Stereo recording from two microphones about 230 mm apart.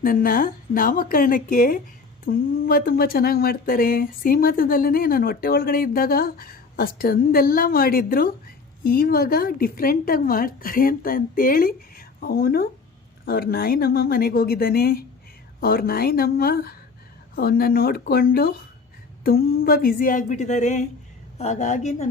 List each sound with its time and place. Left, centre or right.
0.0 s speech: left